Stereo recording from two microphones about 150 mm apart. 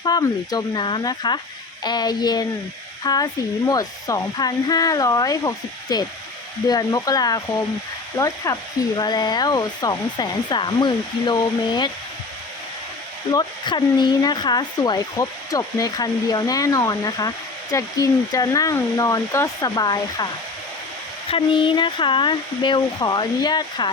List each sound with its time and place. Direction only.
0.0 s speech: 25° left (ahead or behind)
13.3 s speech: 30° left (ahead or behind)
21.2 s speech: 35° left (ahead or behind)